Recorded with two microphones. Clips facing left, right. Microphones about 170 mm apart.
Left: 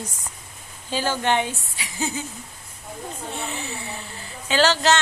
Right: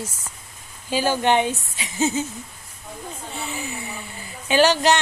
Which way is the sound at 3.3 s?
Centre (ahead or behind).